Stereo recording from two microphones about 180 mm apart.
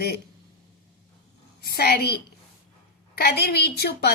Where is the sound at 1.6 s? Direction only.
60° left (ahead or behind).